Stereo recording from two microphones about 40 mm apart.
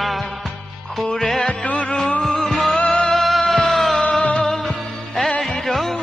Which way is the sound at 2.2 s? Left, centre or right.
Centre.